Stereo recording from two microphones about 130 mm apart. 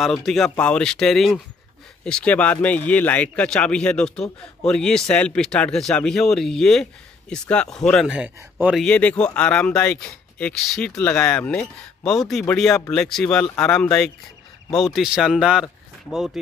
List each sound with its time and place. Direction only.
0.0 s speech: centre (ahead or behind)
8.4 s speech: 15° right (ahead or behind)
8.7 s speech: 10° left (ahead or behind)